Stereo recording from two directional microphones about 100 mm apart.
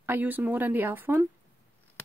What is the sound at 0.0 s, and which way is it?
Speech, 20° right (ahead or behind).